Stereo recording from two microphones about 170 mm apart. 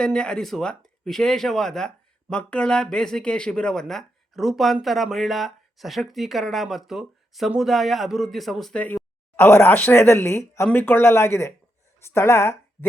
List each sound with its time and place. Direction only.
0.0 s speech: 5° left (ahead or behind)